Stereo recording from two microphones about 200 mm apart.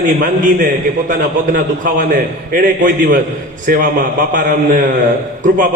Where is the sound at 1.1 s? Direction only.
40° right (ahead or behind).